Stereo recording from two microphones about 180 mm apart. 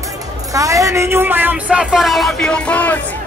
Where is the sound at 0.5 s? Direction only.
20° right (ahead or behind); by 3.0 s 10° left (ahead or behind).